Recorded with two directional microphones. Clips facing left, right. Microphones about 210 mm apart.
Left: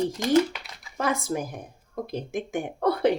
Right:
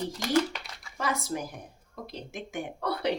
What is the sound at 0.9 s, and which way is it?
Speech, 50° left (ahead or behind).